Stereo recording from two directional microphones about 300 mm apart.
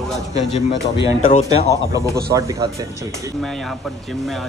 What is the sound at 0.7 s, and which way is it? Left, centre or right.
Speech, left.